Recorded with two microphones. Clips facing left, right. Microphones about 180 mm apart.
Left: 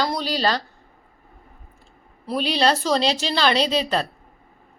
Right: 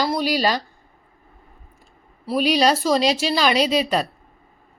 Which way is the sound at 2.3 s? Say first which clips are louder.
Right 3 dB; 10° right (ahead or behind).